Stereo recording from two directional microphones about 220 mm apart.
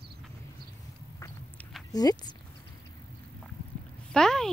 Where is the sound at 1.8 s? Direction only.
15° left (ahead or behind).